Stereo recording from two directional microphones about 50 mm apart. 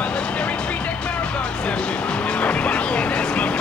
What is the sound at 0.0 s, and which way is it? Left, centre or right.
Music, left.